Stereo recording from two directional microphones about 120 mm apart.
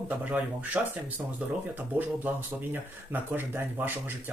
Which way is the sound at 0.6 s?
15° right (ahead or behind).